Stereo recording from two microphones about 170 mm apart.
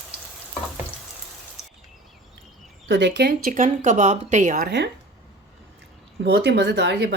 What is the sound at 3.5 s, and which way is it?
Speech, 50° right (ahead or behind).